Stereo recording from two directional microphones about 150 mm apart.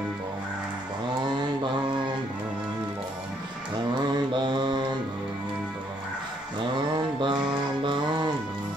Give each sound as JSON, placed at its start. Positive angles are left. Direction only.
{"t": 4.3, "sound": "mantra", "side_deg": -30}
{"t": 7.2, "sound": "mantra", "side_deg": -35}